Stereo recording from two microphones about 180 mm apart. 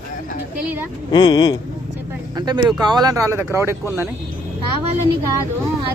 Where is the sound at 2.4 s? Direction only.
25° right (ahead or behind).